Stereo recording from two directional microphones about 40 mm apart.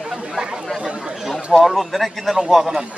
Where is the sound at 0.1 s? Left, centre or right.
Centre.